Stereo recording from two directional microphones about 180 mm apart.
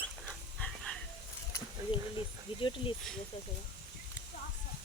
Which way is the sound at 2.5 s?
30° left (ahead or behind).